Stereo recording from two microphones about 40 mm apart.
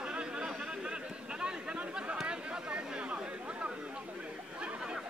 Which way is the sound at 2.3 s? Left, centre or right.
Right.